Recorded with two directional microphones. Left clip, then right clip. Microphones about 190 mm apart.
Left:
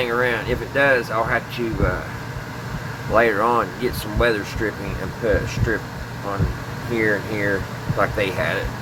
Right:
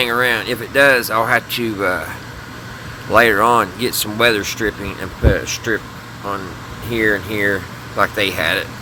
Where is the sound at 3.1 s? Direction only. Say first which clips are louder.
Right 5 dB; 65° right (ahead or behind); by 5.8 s 50° right (ahead or behind).